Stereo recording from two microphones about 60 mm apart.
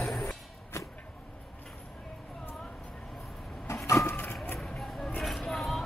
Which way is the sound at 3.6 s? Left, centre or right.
Left.